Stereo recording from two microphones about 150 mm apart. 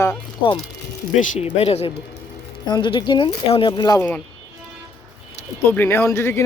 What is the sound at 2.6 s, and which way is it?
Speech, 30° left (ahead or behind).